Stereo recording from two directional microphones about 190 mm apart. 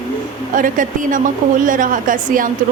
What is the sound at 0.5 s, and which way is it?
A woman's voice, 45° right (ahead or behind).